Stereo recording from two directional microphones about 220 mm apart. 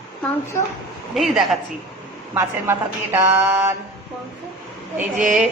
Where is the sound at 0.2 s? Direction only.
10° left (ahead or behind).